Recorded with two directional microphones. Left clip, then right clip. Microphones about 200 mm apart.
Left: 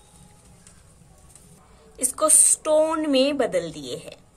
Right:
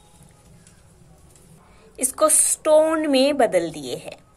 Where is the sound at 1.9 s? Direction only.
20° right (ahead or behind).